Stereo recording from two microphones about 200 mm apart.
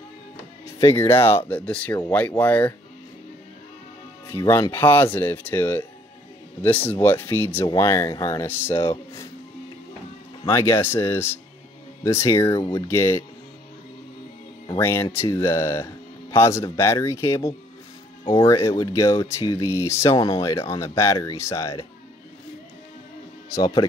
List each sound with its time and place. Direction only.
0.7 s speech: 15° left (ahead or behind)
4.3 s speech: 15° left (ahead or behind)
10.4 s speech: 15° left (ahead or behind)
14.8 s speech: 10° left (ahead or behind)
23.5 s speech: 20° left (ahead or behind)